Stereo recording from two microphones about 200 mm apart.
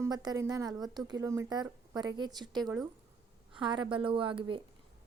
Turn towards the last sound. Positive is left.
turn(degrees=-25)  # may be behind; listen again after turning